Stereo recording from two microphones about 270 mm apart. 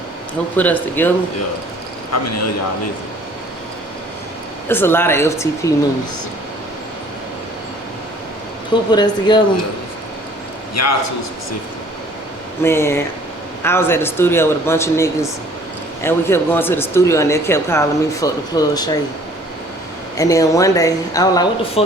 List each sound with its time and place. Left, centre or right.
0.5 s speech: centre
2.1 s a man's voice: left
4.7 s speech: centre
8.9 s speech: centre
10.8 s a man's voice: left
12.6 s speech: centre
20.1 s speech: centre